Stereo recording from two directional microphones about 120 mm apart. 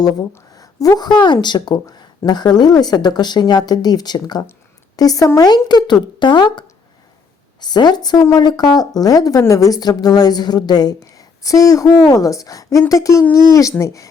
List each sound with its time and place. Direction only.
0.0 s a woman's voice: 35° left (ahead or behind)